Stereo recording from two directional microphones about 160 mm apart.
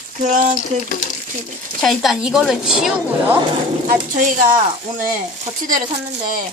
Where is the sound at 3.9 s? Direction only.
55° right (ahead or behind).